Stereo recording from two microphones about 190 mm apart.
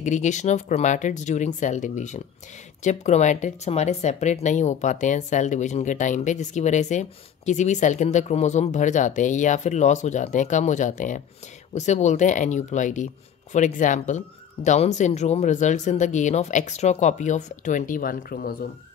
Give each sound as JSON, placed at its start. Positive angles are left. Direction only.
{"t": 0.0, "sound": "speech", "side_deg": 40}